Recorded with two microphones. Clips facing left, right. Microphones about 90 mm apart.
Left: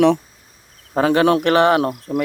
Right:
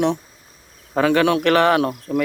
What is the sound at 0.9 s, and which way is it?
Speech, 30° left (ahead or behind).